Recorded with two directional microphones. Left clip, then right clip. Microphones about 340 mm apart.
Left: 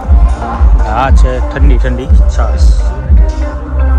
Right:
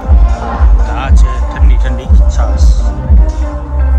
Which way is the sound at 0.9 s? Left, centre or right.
Centre.